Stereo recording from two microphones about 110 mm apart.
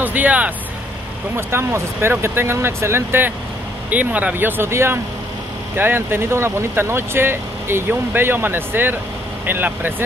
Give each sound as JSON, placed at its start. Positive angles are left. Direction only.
{"t": 0.0, "sound": "speech", "side_deg": -15}